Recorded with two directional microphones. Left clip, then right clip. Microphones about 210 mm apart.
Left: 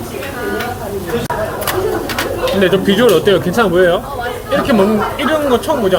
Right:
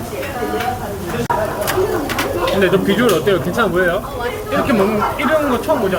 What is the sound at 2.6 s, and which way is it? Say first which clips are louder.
Speech: left 4 dB; 40° left (ahead or behind).